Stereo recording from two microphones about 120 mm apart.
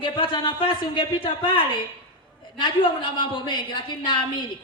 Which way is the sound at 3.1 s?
45° left (ahead or behind).